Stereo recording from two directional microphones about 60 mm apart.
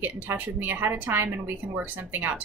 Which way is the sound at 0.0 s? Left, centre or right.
Right.